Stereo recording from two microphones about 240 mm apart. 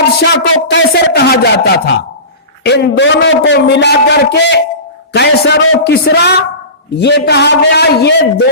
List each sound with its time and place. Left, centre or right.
0.3 s a man's voice: left